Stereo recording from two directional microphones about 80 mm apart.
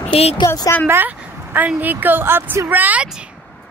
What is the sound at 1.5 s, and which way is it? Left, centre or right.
Speech, right.